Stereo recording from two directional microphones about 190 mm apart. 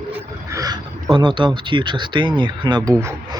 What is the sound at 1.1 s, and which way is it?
Speech, 25° right (ahead or behind).